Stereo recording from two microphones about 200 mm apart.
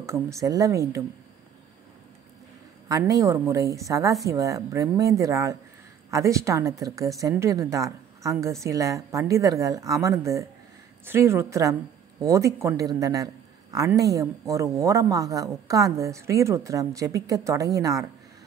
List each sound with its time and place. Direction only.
0.0 s a woman's voice: 15° right (ahead or behind)
2.9 s a woman's voice: 15° right (ahead or behind)